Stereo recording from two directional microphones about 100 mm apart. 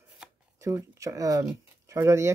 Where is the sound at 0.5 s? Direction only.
30° right (ahead or behind).